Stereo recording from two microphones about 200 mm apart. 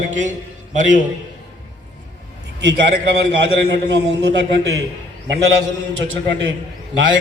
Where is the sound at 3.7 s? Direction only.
60° right (ahead or behind).